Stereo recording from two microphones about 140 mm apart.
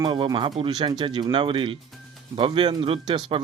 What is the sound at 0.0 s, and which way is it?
Speech, 35° right (ahead or behind).